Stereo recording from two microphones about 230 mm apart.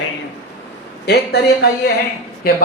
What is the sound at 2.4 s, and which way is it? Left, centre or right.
Speech, left.